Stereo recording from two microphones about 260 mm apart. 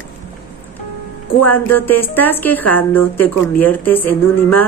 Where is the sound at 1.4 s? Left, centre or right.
Centre.